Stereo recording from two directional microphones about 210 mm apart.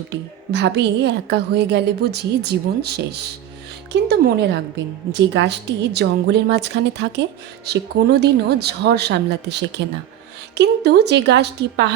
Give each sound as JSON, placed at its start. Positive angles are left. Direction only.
{"t": 0.1, "sound": "a woman's voice", "side_deg": -55}